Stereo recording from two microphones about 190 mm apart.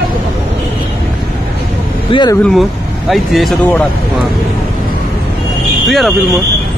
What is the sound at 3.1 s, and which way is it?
Speech, centre (ahead or behind).